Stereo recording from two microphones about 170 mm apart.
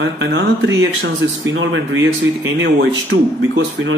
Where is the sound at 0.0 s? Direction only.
90° right.